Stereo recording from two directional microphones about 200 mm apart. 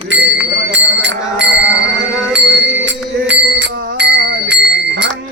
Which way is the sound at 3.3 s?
60° right (ahead or behind).